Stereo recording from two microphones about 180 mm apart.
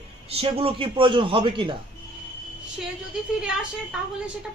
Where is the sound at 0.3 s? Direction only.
30° right (ahead or behind).